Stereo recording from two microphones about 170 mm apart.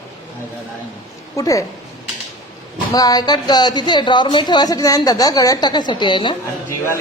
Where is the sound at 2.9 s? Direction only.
20° left (ahead or behind).